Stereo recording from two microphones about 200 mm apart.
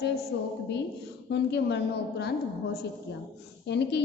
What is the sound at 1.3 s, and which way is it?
A woman's voice, 60° left (ahead or behind).